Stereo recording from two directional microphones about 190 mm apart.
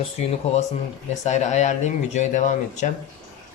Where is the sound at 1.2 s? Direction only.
40° left (ahead or behind).